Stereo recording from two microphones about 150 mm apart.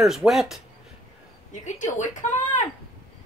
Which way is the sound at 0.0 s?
Centre (ahead or behind).